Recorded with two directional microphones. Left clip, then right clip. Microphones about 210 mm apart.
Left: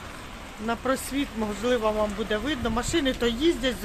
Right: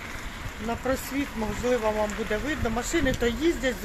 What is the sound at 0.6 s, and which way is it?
Speech, 10° left (ahead or behind).